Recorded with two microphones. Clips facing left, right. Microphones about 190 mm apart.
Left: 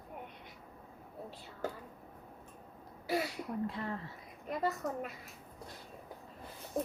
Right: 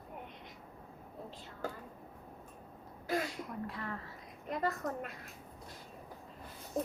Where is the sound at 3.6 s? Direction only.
25° left (ahead or behind).